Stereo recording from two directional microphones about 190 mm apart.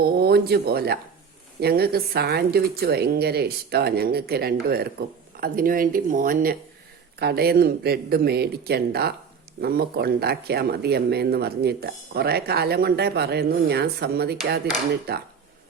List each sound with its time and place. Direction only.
0.0 s speech: 55° right (ahead or behind)